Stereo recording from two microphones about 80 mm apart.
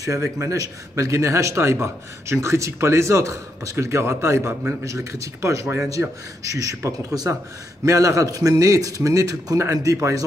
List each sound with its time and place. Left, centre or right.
0.0 s a man's voice: right